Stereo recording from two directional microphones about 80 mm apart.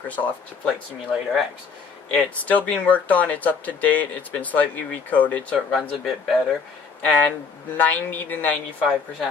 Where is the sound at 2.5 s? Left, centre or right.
Centre.